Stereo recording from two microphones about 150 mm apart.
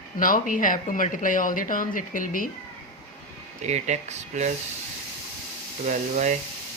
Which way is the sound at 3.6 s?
50° right (ahead or behind).